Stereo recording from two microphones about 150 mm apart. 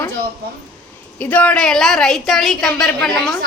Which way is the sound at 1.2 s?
10° left (ahead or behind).